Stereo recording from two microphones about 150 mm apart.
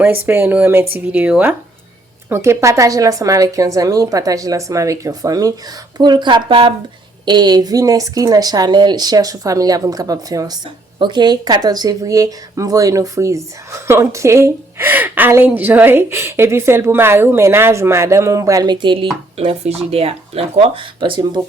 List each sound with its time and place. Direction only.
0.0 s a woman's voice: 15° right (ahead or behind); by 21.4 s 30° right (ahead or behind)